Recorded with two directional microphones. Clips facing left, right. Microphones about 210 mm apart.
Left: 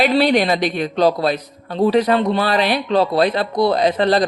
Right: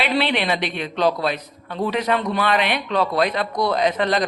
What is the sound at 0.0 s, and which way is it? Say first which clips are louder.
A man's voice: left 6 dB; 40° left (ahead or behind).